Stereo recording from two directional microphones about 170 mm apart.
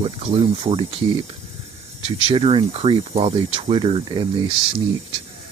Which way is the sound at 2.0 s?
35° right (ahead or behind).